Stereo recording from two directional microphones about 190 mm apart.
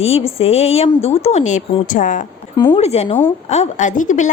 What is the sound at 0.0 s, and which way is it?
A woman's voice, 30° left (ahead or behind).